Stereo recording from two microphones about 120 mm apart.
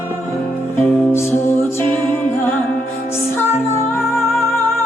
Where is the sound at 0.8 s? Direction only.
15° left (ahead or behind).